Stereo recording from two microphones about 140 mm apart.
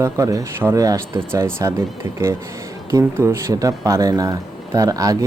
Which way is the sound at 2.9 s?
20° right (ahead or behind).